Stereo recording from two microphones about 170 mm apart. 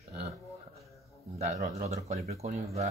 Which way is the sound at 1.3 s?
40° right (ahead or behind).